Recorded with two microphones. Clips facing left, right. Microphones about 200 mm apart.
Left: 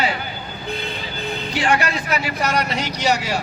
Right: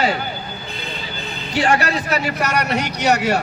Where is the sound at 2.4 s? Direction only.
65° right (ahead or behind).